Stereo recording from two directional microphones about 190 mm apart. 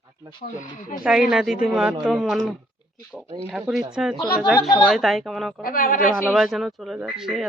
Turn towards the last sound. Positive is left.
turn(degrees=-5)  # may be behind; listen again after turning